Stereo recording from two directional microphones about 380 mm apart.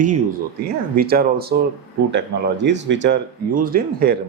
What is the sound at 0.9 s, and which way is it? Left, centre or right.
Speech, right.